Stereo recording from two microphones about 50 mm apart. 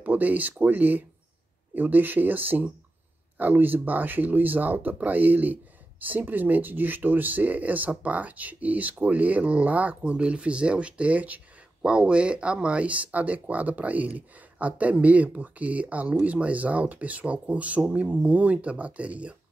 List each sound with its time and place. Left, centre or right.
0.0 s speech: right